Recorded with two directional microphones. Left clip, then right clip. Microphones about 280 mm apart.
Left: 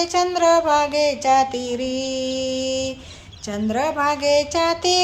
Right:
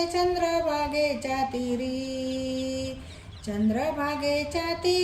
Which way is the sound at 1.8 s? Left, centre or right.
Left.